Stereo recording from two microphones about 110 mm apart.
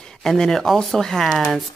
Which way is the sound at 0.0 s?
5° left (ahead or behind).